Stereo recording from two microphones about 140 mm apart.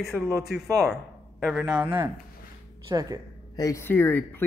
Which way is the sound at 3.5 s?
25° left (ahead or behind).